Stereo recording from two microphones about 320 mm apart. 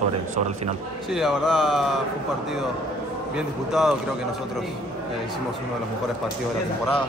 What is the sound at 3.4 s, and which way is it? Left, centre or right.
Speech, centre.